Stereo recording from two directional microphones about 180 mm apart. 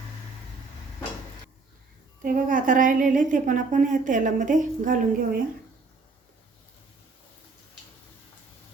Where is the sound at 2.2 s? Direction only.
50° right (ahead or behind).